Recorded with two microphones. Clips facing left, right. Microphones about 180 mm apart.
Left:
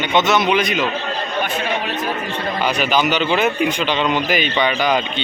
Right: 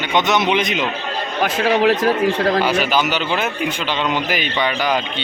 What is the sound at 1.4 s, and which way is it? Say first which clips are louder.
Speech: right 7 dB; 90° right.